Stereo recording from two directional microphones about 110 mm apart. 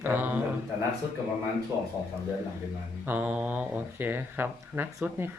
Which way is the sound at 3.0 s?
15° right (ahead or behind).